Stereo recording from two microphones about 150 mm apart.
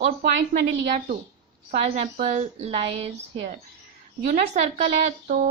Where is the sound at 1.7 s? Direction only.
45° right (ahead or behind).